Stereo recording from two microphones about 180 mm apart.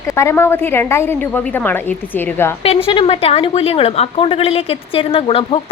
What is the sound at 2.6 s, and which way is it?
A woman's voice, 30° left (ahead or behind).